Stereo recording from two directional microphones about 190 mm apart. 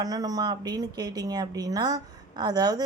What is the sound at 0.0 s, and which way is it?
A woman's voice, 20° right (ahead or behind).